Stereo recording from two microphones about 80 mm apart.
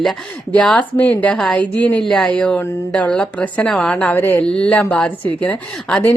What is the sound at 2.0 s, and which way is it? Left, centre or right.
A woman's voice, centre.